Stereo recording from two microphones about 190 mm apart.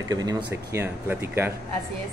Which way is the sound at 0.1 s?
20° right (ahead or behind).